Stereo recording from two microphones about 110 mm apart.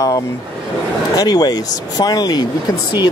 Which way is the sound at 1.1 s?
35° left (ahead or behind).